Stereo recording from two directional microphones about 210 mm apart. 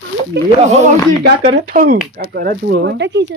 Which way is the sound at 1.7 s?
40° right (ahead or behind).